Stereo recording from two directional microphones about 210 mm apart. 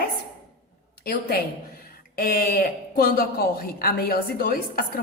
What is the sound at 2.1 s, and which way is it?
Speech, 45° left (ahead or behind).